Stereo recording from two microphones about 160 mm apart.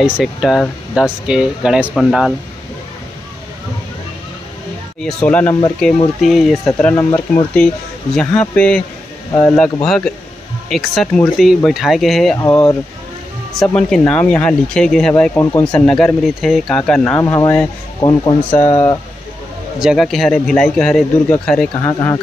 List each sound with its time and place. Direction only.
0.0 s speech: centre (ahead or behind)
5.0 s speech: 10° left (ahead or behind)
12.4 s speech: 15° left (ahead or behind)
13.5 s speech: centre (ahead or behind); by 18.9 s 25° left (ahead or behind)
19.8 s speech: centre (ahead or behind); by 22.2 s 15° left (ahead or behind)